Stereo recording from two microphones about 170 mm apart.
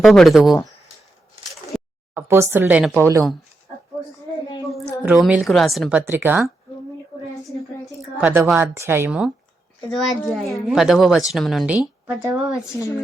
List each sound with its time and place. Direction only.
0.0 s speech: centre (ahead or behind)
2.1 s a woman's voice: 15° right (ahead or behind)
3.0 s a woman's voice: 15° right (ahead or behind)
5.0 s speech: 5° right (ahead or behind)
6.1 s a woman's voice: 10° right (ahead or behind)
8.2 s a woman's voice: 10° right (ahead or behind)
12.6 s speech: 20° left (ahead or behind)